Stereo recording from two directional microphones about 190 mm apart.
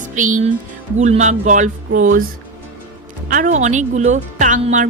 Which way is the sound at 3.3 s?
40° right (ahead or behind).